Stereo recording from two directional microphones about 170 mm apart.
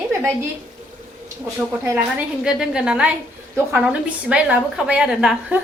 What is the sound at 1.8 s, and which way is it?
Speech, 15° right (ahead or behind).